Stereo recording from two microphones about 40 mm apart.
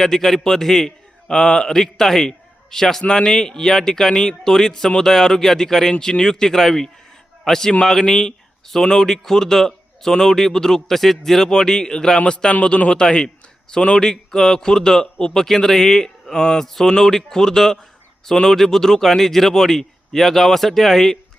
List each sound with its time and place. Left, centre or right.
0.0 s a man's voice: centre
16.3 s mantra: centre
16.9 s speech: centre